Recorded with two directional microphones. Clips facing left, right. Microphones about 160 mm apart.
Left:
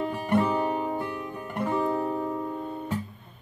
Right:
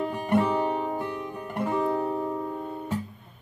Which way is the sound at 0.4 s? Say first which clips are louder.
Even; 25° right (ahead or behind).